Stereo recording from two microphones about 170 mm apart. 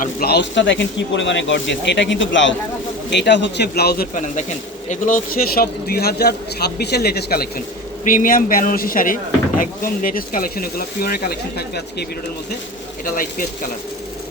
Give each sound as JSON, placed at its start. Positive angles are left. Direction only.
{"t": 0.0, "sound": "a man's voice", "side_deg": 65}
{"t": 8.0, "sound": "speech", "side_deg": 55}